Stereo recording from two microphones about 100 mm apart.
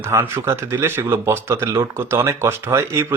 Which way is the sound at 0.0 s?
25° right (ahead or behind).